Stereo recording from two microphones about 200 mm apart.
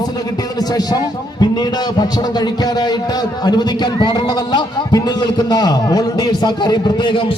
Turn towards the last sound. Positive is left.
turn(degrees=25)  # may be behind; listen again after turning